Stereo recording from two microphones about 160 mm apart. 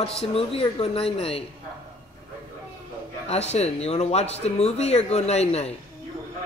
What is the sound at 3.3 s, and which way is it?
Speech, 40° left (ahead or behind).